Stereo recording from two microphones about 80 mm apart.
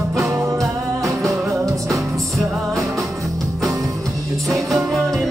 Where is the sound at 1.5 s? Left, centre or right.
Right.